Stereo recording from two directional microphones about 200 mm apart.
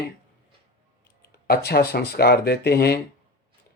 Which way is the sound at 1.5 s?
50° left (ahead or behind).